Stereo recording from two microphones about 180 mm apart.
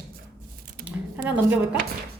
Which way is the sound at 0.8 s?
10° right (ahead or behind).